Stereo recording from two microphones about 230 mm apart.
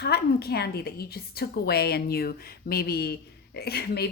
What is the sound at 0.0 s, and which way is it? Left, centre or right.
A woman's voice, left.